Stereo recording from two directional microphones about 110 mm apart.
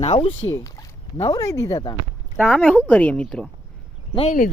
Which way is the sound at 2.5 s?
10° left (ahead or behind).